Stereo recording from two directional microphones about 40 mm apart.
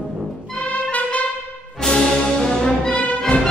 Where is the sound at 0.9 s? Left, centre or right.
Left.